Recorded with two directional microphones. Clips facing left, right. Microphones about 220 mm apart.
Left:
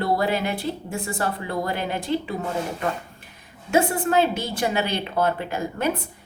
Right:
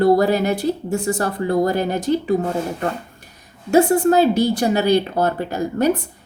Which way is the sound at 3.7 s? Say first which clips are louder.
Right 6 dB; 40° right (ahead or behind).